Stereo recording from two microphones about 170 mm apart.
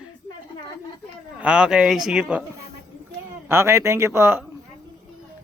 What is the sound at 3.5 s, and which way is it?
Speech, 15° right (ahead or behind).